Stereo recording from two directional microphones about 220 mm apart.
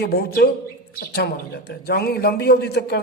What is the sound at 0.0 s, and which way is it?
A man's voice, 45° left (ahead or behind).